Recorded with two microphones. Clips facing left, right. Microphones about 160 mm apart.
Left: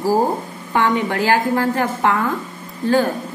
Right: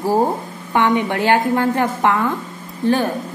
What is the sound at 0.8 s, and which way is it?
A woman's voice, 20° right (ahead or behind).